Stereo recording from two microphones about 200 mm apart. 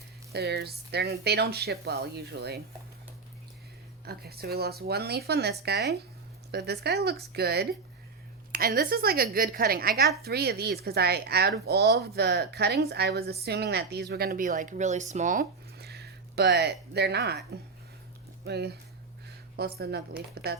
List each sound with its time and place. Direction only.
0.3 s a woman's voice: 50° right (ahead or behind)
4.0 s a woman's voice: 50° right (ahead or behind)
18.4 s speech: 55° right (ahead or behind)
19.8 s a woman's voice: 50° right (ahead or behind)